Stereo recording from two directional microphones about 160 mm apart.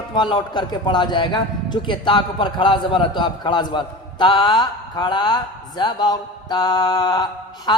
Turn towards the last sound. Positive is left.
turn(degrees=25)  # may be behind; listen again after turning